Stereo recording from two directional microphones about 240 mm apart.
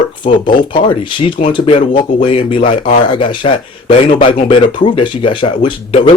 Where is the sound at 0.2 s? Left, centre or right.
Left.